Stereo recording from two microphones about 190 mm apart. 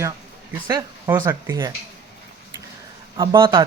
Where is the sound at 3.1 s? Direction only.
25° right (ahead or behind).